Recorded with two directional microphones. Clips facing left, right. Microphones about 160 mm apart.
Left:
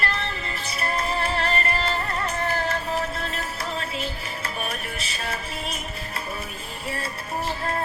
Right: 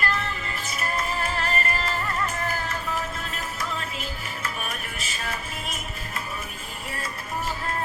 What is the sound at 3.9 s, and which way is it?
Music, 35° left (ahead or behind).